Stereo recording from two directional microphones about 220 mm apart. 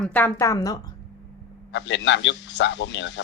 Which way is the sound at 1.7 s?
55° left (ahead or behind).